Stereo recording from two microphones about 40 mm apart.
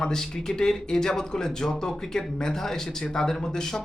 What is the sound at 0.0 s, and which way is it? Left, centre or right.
Speech, centre.